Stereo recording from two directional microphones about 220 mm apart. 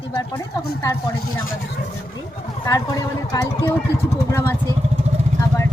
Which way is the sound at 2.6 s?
15° left (ahead or behind).